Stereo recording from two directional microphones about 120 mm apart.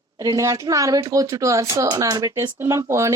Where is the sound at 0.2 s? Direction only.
30° right (ahead or behind).